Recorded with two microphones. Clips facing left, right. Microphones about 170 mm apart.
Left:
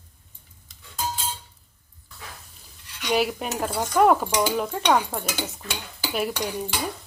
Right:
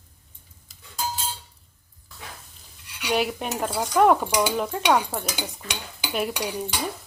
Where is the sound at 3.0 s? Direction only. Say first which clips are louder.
Left 1 dB; centre (ahead or behind).